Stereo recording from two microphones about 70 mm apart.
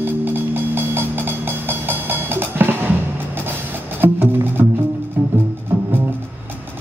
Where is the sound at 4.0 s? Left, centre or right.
Right.